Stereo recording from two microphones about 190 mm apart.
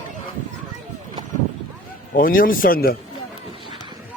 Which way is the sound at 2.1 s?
50° left (ahead or behind).